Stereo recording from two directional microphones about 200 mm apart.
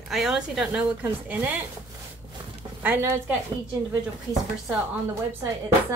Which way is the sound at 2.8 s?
10° right (ahead or behind).